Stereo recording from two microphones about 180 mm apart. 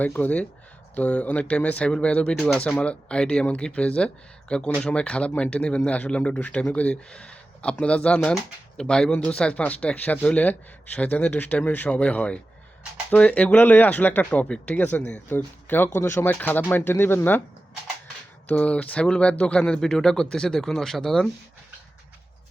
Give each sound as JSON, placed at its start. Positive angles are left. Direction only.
{"t": 0.0, "sound": "speech", "side_deg": 10}
{"t": 18.4, "sound": "speech", "side_deg": 10}